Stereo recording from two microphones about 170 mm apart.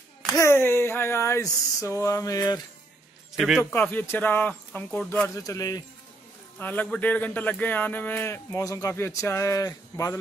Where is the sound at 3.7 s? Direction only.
10° left (ahead or behind).